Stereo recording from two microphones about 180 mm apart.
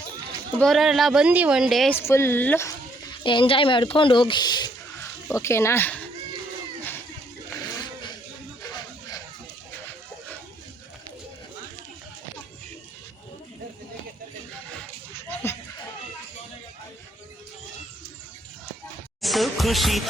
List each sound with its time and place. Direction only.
0.6 s a woman's voice: centre (ahead or behind)
2.0 s speech: 15° left (ahead or behind)
7.5 s vehicle: 20° left (ahead or behind)
8.6 s a sound: 20° left (ahead or behind)
14.8 s a sound: 10° left (ahead or behind)
19.2 s music: centre (ahead or behind)